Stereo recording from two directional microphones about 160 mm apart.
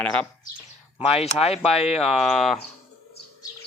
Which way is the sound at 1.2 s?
40° left (ahead or behind).